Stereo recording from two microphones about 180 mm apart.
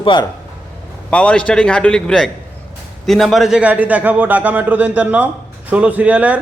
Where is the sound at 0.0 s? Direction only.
25° left (ahead or behind).